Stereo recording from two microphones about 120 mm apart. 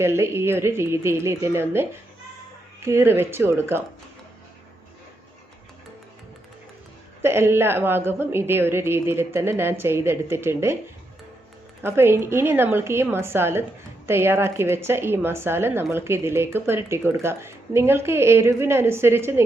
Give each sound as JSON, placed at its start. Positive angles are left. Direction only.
{"t": 0.0, "sound": "speech", "side_deg": -20}
{"t": 7.2, "sound": "speech", "side_deg": -20}
{"t": 11.8, "sound": "speech", "side_deg": -20}